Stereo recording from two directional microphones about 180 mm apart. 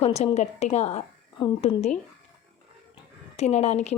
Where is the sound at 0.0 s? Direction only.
35° left (ahead or behind).